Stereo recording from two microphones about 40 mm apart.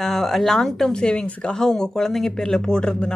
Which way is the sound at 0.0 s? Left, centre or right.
Centre.